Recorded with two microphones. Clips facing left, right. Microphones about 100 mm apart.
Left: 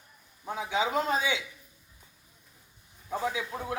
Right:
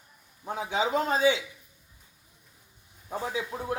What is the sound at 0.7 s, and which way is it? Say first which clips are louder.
Speech: right 1 dB; 35° right (ahead or behind).